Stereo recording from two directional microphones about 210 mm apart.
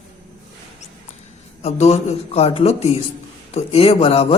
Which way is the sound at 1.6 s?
30° left (ahead or behind).